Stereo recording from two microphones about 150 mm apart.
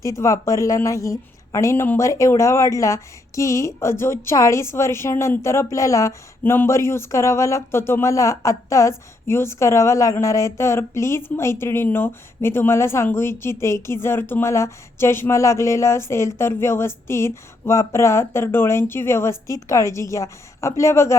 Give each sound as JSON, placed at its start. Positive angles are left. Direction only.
{"t": 0.0, "sound": "a woman's voice", "side_deg": 20}